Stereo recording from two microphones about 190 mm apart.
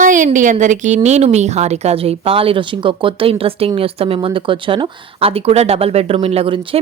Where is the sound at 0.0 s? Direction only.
45° right (ahead or behind).